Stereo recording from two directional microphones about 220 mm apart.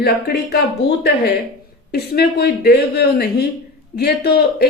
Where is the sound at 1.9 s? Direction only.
45° left (ahead or behind).